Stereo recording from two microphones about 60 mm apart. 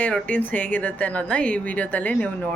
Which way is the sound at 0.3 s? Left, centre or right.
Left.